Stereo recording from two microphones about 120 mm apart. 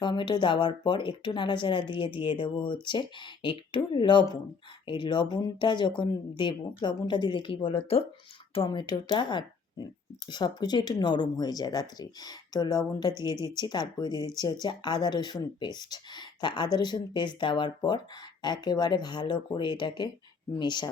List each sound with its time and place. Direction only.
0.0 s speech: 40° left (ahead or behind)